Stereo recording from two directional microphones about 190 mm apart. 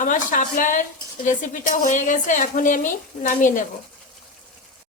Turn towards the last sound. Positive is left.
turn(degrees=45)  # may be behind; listen again after turning